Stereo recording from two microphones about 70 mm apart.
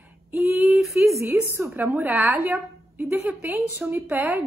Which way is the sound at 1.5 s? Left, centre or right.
Right.